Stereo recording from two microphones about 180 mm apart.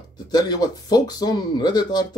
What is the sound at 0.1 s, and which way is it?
Speech, 20° left (ahead or behind).